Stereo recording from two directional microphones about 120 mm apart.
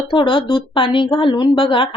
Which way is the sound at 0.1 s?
45° left (ahead or behind).